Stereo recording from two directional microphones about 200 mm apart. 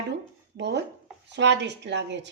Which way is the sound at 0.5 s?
60° right (ahead or behind).